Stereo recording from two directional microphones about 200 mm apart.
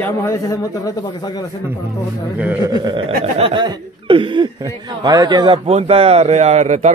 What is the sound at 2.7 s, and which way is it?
Speech, 20° right (ahead or behind).